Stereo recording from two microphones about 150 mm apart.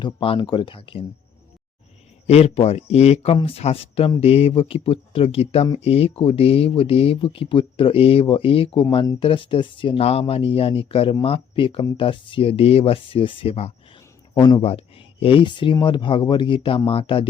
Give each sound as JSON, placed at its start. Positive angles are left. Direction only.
{"t": 0.0, "sound": "speech", "side_deg": 35}
{"t": 2.2, "sound": "a man's voice", "side_deg": 45}